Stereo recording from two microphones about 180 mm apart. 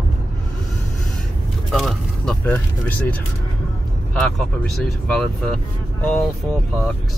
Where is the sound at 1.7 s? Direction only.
Centre (ahead or behind).